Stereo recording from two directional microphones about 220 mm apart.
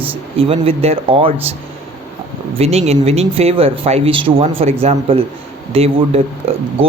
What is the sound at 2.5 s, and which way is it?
Speech, 30° right (ahead or behind).